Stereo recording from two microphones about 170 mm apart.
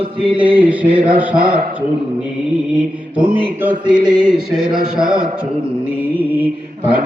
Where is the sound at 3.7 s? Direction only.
25° right (ahead or behind).